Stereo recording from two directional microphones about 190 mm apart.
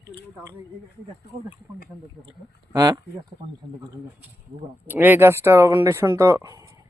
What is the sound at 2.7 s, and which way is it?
Speech, 20° right (ahead or behind).